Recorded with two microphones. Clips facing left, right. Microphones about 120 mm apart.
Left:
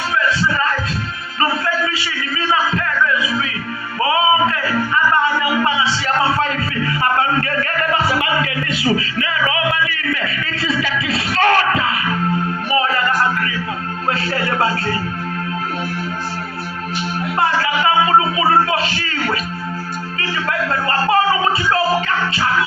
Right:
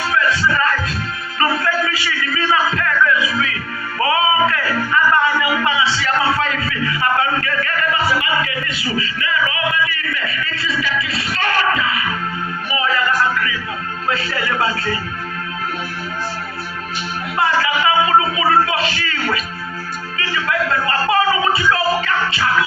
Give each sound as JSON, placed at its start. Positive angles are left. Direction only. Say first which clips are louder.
{"t": 0.3, "sound": "music", "louder": "right 1 dB", "side_deg": 25}
{"t": 1.4, "sound": "a sound", "louder": "even", "side_deg": 25}
{"t": 4.0, "sound": "music", "louder": "left 1 dB", "side_deg": 25}
{"t": 8.2, "sound": "music", "louder": "left 1 dB", "side_deg": 65}
{"t": 11.3, "sound": "music", "louder": "left 4 dB", "side_deg": 65}
{"t": 12.7, "sound": "music", "louder": "left 2 dB", "side_deg": 45}
{"t": 14.1, "sound": "music", "louder": "left 1 dB", "side_deg": 45}
{"t": 17.3, "sound": "music", "louder": "right 1 dB", "side_deg": 45}
{"t": 18.1, "sound": "a sound", "louder": "left 1 dB", "side_deg": 30}
{"t": 20.1, "sound": "music", "louder": "right 1 dB", "side_deg": 35}